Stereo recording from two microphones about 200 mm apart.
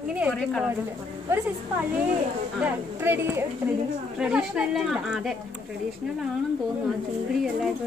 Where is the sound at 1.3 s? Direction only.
10° right (ahead or behind).